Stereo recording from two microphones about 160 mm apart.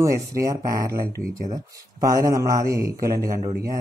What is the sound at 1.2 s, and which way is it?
Speech, 60° right (ahead or behind).